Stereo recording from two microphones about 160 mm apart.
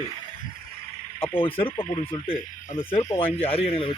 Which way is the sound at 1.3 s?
35° left (ahead or behind).